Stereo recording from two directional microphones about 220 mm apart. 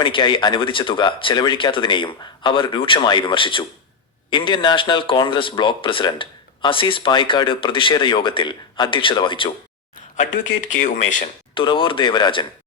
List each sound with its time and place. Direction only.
0.0 s speech: 20° left (ahead or behind)
10.8 s speech: 35° left (ahead or behind)
11.5 s speech: 25° left (ahead or behind)